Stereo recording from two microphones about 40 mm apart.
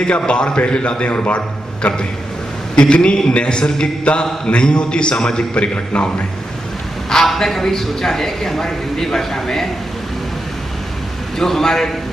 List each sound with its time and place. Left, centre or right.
0.0 s a man's voice: left
7.1 s a man's voice: centre
11.3 s a man's voice: centre